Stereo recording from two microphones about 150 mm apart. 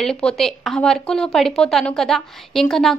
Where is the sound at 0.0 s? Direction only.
5° left (ahead or behind).